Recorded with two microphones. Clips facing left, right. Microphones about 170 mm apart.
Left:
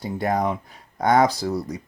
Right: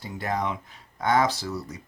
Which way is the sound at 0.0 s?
35° left (ahead or behind).